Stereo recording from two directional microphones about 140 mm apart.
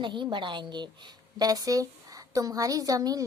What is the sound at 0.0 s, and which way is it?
A woman's voice, 35° right (ahead or behind).